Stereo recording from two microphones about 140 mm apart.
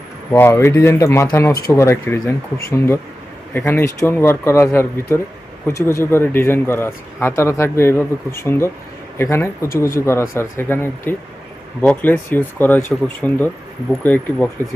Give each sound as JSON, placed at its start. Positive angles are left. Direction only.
{"t": 0.3, "sound": "speech", "side_deg": 15}